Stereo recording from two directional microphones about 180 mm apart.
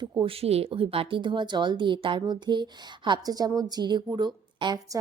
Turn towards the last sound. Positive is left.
turn(degrees=-20)  # may be behind; listen again after turning